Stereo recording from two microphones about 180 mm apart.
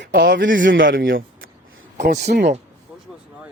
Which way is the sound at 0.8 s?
50° right (ahead or behind).